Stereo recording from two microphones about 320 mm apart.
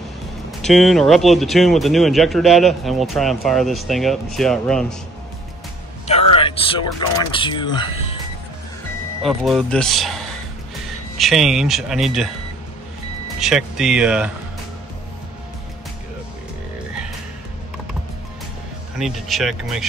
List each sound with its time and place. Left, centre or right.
0.5 s speech: centre
6.0 s music: centre
7.2 s speech: centre
9.2 s speech: centre
13.4 s speech: centre
18.9 s speech: centre